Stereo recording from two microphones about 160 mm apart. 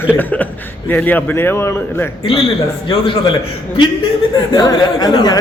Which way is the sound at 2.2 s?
35° left (ahead or behind).